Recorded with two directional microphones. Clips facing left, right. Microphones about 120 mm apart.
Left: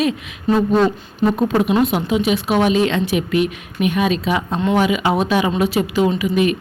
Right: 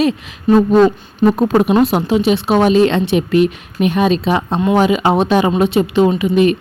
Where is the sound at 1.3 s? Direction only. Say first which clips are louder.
Right 3 dB; 40° right (ahead or behind).